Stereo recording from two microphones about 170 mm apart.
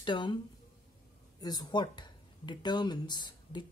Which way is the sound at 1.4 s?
25° left (ahead or behind).